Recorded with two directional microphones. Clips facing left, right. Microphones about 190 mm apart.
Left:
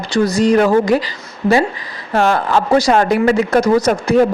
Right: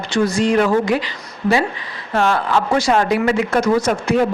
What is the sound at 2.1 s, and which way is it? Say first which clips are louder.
Speech: left 3 dB; 40° left (ahead or behind).